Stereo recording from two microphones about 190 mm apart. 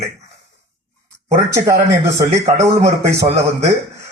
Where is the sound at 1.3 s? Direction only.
15° right (ahead or behind).